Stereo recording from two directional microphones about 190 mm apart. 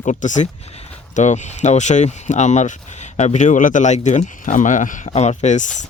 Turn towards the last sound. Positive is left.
turn(degrees=40)  # may be behind; listen again after turning